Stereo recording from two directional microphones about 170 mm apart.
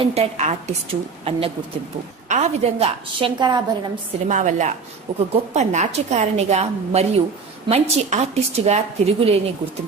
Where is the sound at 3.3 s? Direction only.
25° right (ahead or behind).